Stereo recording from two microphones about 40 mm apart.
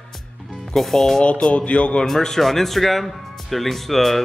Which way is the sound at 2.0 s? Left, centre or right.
Centre.